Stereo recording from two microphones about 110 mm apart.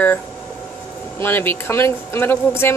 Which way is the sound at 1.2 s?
20° left (ahead or behind).